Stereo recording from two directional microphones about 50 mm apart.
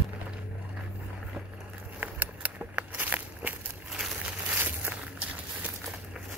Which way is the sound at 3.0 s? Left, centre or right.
Right.